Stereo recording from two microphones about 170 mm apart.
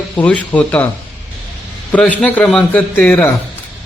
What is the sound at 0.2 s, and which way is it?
Speech, 10° left (ahead or behind).